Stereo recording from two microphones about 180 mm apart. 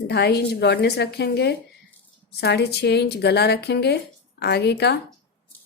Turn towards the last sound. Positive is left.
turn(degrees=65)  # may be behind; listen again after turning